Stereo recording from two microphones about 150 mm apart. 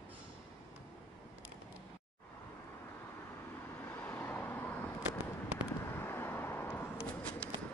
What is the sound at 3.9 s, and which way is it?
Vehicle, 15° left (ahead or behind).